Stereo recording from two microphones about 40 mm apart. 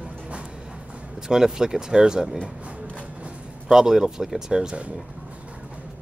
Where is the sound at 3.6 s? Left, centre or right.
Centre.